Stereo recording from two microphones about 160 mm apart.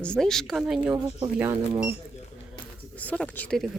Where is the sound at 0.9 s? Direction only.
30° right (ahead or behind).